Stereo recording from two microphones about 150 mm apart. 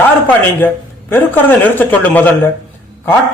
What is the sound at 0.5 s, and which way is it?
A man's voice, 15° left (ahead or behind).